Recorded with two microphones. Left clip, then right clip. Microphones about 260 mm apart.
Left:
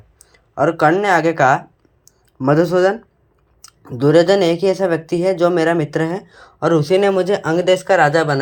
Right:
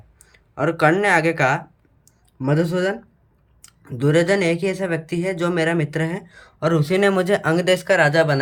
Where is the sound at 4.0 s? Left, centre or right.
Centre.